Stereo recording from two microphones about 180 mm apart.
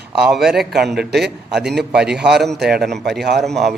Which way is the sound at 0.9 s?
65° right (ahead or behind).